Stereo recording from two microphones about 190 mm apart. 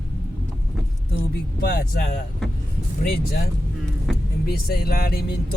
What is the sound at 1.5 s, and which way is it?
Speech, 55° left (ahead or behind).